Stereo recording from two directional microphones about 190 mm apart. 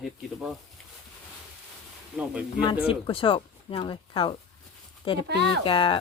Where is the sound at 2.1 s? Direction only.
5° right (ahead or behind).